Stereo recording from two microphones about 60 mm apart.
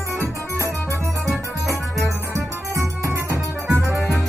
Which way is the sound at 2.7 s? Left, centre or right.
Right.